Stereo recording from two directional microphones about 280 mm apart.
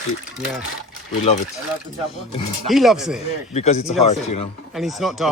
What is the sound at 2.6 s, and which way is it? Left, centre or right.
Speech, centre.